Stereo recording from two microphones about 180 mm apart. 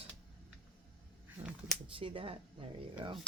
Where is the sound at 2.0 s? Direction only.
30° right (ahead or behind).